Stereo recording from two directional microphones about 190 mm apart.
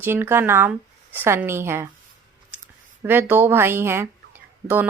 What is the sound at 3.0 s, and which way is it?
A woman's voice, 10° right (ahead or behind).